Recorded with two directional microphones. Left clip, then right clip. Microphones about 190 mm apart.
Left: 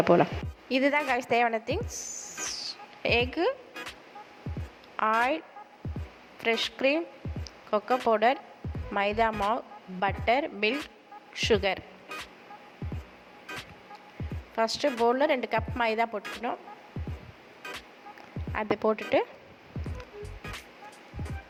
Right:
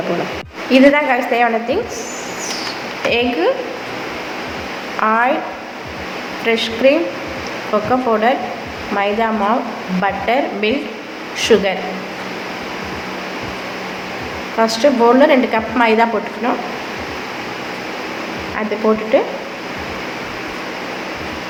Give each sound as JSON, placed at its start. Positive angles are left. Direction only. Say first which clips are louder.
{"t": 0.7, "sound": "speech", "louder": "right 14 dB", "side_deg": 45}
{"t": 3.0, "sound": "speech", "louder": "right 10 dB", "side_deg": 50}
{"t": 4.9, "sound": "speech", "louder": "right 11 dB", "side_deg": 50}
{"t": 6.4, "sound": "speech", "louder": "right 13 dB", "side_deg": 45}
{"t": 14.6, "sound": "speech", "louder": "right 13 dB", "side_deg": 45}
{"t": 19.1, "sound": "speech", "louder": "right 12 dB", "side_deg": 50}